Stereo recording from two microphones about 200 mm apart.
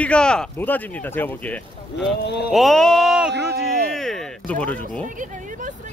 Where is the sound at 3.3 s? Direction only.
50° right (ahead or behind).